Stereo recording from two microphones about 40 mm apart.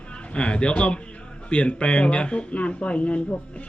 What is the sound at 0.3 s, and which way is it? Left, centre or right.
Speech, left.